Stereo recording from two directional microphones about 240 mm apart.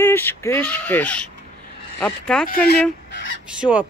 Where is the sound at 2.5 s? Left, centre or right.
Left.